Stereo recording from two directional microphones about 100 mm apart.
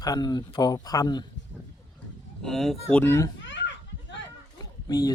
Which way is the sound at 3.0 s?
25° left (ahead or behind).